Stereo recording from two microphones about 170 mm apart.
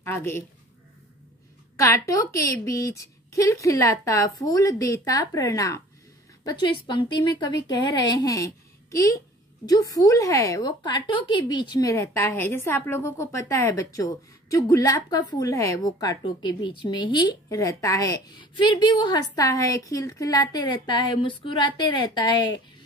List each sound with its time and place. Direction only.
0.0 s a woman's voice: 15° left (ahead or behind)
1.8 s a woman's voice: 20° left (ahead or behind)